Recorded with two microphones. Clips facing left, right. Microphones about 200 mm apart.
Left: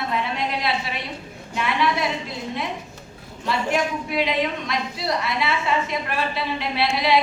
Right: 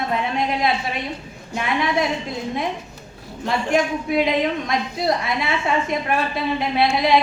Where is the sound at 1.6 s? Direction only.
50° right (ahead or behind).